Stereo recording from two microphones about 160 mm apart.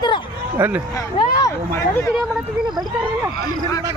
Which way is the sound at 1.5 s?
20° left (ahead or behind).